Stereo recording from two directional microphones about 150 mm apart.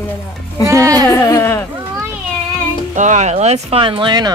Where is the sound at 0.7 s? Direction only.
20° right (ahead or behind).